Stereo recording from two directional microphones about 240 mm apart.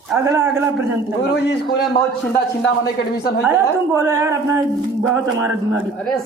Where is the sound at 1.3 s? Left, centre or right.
Left.